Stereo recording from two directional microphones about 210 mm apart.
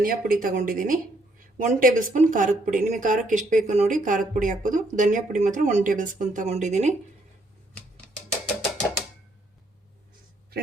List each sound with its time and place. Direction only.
0.0 s a woman's voice: 45° right (ahead or behind)